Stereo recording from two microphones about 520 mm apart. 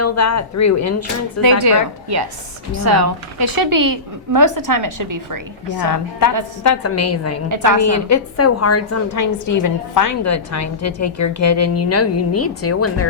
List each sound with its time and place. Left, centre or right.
0.0 s speech: left
1.4 s a woman's voice: right
2.7 s a woman's voice: right
3.3 s a woman's voice: right
6.6 s a woman's voice: left
7.5 s a woman's voice: right
7.8 s a woman's voice: left